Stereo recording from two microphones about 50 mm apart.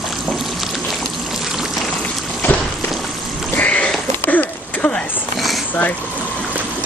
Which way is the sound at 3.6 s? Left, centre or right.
Left.